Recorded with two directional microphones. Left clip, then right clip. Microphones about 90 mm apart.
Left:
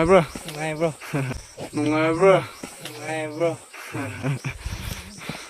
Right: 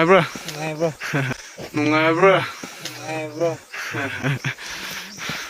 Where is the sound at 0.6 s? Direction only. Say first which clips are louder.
Right 1 dB; 85° right.